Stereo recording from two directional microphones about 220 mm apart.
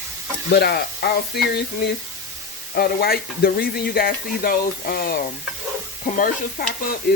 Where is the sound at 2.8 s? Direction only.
45° left (ahead or behind).